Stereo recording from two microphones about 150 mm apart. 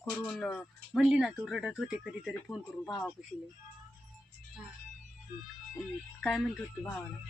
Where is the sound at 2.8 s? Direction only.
5° left (ahead or behind).